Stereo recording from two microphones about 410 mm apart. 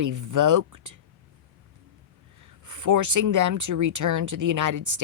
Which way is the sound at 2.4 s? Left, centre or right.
Right.